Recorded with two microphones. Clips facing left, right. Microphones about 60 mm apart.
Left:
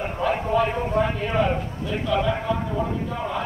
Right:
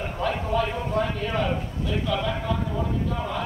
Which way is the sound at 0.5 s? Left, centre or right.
Centre.